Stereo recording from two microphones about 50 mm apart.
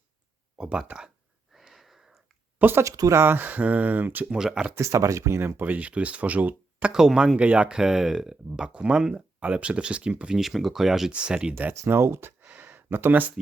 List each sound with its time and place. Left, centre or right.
0.6 s speech: centre
1.5 s wheeze: centre
2.8 s speech: right
3.2 s speech: right
4.3 s speech: centre
4.8 s speech: right
5.5 s speech: right
6.9 s speech: centre
7.3 s speech: right
10.3 s speech: centre
11.1 s speech: centre
11.9 s speech: right
12.5 s speech: right